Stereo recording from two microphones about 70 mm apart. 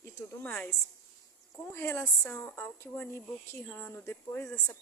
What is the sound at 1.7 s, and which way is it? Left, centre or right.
A woman's voice, left.